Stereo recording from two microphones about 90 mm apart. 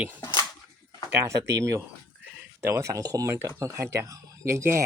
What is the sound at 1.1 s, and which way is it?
Speech, 35° right (ahead or behind).